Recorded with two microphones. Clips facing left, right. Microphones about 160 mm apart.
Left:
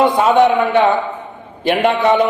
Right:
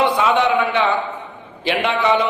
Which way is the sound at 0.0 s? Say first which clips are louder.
Left 5 dB; 45° left (ahead or behind).